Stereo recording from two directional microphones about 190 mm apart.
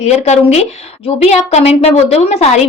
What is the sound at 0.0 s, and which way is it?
Speech, 35° left (ahead or behind).